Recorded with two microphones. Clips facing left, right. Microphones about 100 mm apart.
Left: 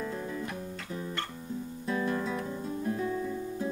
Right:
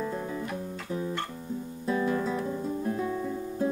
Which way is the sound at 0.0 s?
15° right (ahead or behind).